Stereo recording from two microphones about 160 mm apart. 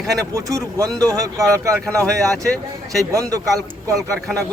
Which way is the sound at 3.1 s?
20° right (ahead or behind).